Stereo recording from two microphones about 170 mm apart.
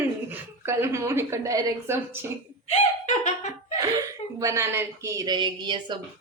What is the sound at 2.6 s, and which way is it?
Speech, 40° left (ahead or behind).